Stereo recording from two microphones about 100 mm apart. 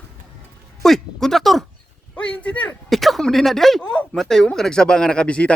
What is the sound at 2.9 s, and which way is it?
Speech, centre (ahead or behind).